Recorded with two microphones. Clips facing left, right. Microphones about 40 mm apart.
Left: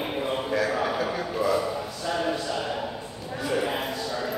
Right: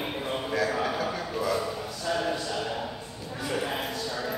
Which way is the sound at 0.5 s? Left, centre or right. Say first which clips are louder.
Left 1 dB; centre.